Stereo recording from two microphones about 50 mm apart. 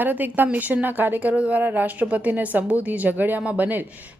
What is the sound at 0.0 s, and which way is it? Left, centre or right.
A woman's voice, right.